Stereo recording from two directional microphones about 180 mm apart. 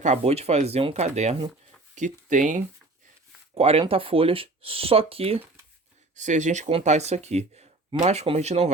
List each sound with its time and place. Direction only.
0.0 s speech: 35° right (ahead or behind)
3.5 s speech: 30° right (ahead or behind)